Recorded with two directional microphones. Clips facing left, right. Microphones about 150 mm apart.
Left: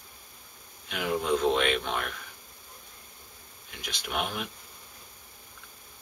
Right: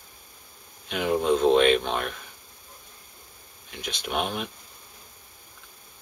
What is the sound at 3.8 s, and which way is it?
Speech, 25° right (ahead or behind).